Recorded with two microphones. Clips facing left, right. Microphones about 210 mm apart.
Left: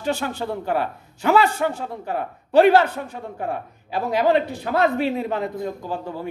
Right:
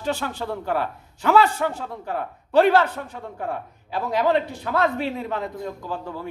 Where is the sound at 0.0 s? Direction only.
Centre (ahead or behind); by 5.5 s 15° left (ahead or behind).